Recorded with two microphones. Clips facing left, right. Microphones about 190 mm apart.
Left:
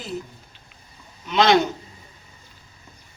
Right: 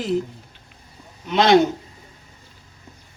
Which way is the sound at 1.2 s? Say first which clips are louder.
Right 2 dB; 55° right (ahead or behind).